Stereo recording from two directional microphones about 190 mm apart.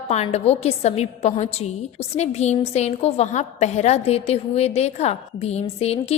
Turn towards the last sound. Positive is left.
turn(degrees=35)  # may be behind; listen again after turning